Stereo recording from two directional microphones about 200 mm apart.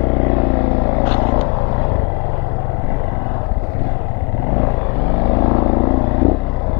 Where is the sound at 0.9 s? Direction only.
25° left (ahead or behind).